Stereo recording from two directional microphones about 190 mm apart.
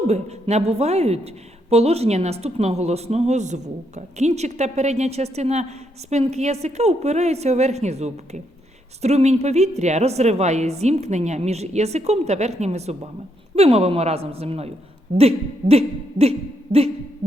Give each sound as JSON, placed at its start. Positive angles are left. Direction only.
{"t": 0.1, "sound": "speech", "side_deg": -35}